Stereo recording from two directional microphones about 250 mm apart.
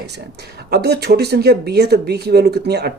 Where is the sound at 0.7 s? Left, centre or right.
Right.